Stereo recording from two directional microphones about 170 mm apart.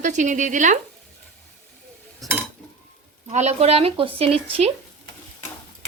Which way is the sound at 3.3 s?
40° right (ahead or behind).